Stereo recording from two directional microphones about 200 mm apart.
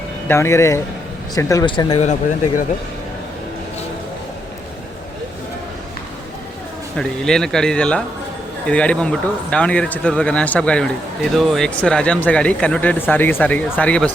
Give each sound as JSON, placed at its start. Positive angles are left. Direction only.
{"t": 0.3, "sound": "speech", "side_deg": 15}
{"t": 6.9, "sound": "speech", "side_deg": 5}